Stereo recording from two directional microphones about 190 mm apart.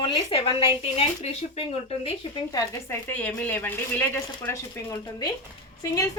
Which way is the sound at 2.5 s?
15° left (ahead or behind).